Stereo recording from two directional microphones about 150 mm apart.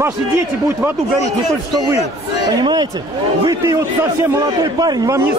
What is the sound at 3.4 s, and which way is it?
Speech, 25° right (ahead or behind).